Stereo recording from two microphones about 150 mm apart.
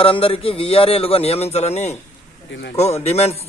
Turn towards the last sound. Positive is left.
turn(degrees=45)  # may be behind; listen again after turning